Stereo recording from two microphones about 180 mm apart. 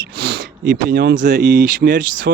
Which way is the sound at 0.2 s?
70° right (ahead or behind).